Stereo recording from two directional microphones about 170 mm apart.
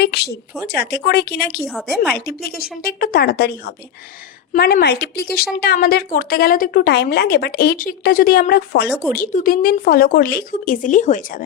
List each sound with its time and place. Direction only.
0.0 s speech: 75° left (ahead or behind)
1.6 s a woman's voice: centre (ahead or behind)
2.1 s a woman's voice: 65° left (ahead or behind)
9.1 s a woman's voice: 50° left (ahead or behind)